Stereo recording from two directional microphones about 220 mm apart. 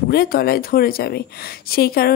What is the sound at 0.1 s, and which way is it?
Speech, 45° left (ahead or behind).